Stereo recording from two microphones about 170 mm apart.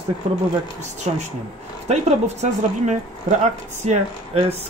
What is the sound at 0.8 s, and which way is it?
Speech, 40° right (ahead or behind).